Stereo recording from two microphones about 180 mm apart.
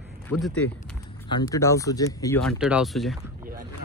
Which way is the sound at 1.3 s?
20° left (ahead or behind).